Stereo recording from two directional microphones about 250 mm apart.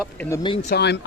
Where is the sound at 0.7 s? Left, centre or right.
Left.